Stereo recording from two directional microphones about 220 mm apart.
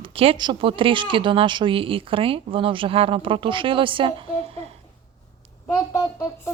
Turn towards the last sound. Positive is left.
turn(degrees=15)  # may be behind; listen again after turning